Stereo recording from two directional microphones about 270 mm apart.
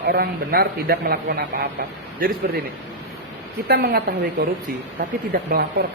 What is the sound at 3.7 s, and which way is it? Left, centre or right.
A man's voice, right.